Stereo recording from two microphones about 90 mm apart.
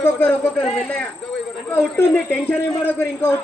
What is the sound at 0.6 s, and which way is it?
Speech, 5° left (ahead or behind).